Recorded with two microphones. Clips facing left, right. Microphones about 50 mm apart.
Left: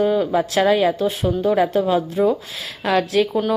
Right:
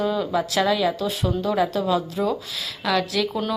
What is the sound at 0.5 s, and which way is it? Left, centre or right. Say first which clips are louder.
Speech: left 5 dB; left.